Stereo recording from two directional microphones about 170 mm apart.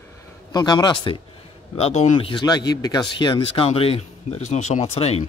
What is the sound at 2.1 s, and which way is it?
Speech, 30° left (ahead or behind).